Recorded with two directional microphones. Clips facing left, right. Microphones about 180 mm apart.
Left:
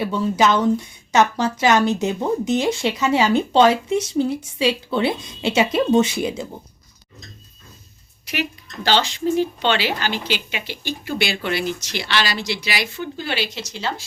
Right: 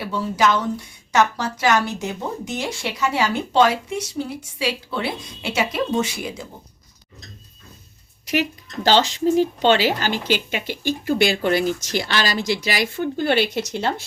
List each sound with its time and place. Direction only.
0.0 s a woman's voice: 20° left (ahead or behind)
8.3 s speech: 40° right (ahead or behind); by 14.0 s 60° right (ahead or behind)